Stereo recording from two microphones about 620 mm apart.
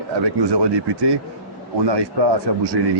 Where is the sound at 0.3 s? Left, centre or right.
Right.